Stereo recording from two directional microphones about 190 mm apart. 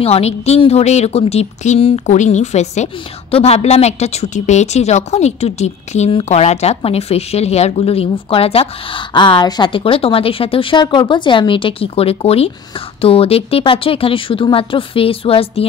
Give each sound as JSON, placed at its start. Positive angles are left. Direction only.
{"t": 0.0, "sound": "a woman's voice", "side_deg": 35}